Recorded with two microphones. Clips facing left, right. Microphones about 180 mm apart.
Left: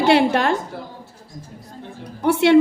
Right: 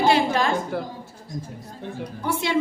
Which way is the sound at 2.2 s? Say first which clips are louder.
Left 10 dB; 70° left (ahead or behind).